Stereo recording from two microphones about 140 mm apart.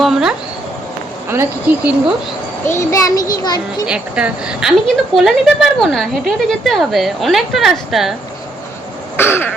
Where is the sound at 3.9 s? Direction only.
5° right (ahead or behind).